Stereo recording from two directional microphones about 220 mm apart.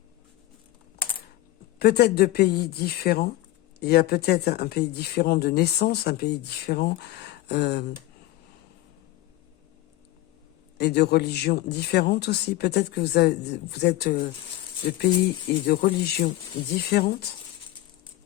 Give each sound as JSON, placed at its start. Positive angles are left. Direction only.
{"t": 1.8, "sound": "speech", "side_deg": 45}
{"t": 10.8, "sound": "speech", "side_deg": 50}
{"t": 15.6, "sound": "speech", "side_deg": 40}